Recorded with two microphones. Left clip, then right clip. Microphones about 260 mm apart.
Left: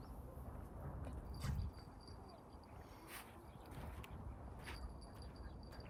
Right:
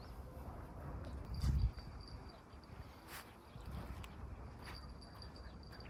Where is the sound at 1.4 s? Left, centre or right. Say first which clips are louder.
Right 3 dB; left.